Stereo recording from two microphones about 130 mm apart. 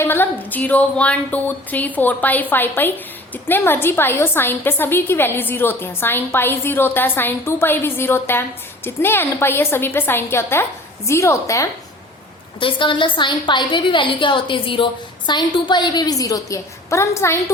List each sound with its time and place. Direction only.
0.0 s a woman's voice: 15° left (ahead or behind)
12.5 s a woman's voice: 40° left (ahead or behind); by 17.4 s 20° left (ahead or behind)